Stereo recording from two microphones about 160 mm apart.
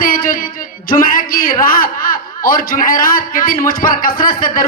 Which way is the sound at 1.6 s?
65° left (ahead or behind).